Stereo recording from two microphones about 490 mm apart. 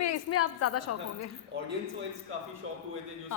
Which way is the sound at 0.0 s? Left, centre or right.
Left.